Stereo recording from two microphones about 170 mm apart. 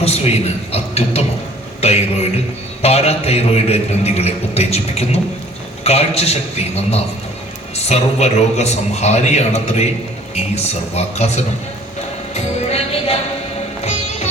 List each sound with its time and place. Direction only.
0.0 s a man's voice: 35° left (ahead or behind)
12.3 s music: 40° left (ahead or behind)